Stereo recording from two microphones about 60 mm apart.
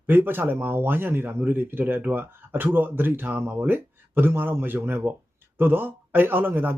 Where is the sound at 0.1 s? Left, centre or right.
Right.